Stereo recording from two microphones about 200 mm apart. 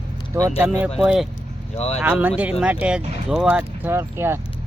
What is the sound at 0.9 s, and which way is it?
Speech, centre (ahead or behind).